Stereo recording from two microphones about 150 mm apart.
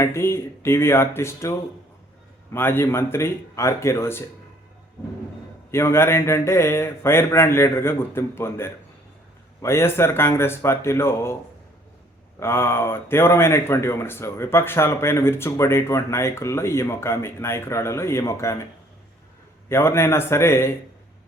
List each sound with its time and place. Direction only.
0.0 s speech: 20° left (ahead or behind)
5.7 s speech: 15° left (ahead or behind)
12.4 s speech: 15° left (ahead or behind)
19.6 s speech: 15° left (ahead or behind)